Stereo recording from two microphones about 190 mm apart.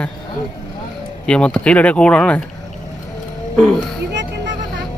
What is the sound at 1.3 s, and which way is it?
Speech, 5° left (ahead or behind).